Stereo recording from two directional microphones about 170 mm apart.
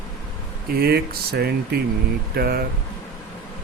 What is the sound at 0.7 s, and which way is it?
Speech, 65° right (ahead or behind).